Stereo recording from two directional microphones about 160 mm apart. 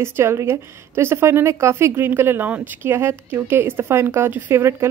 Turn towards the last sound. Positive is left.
turn(degrees=-15)  # may be behind; listen again after turning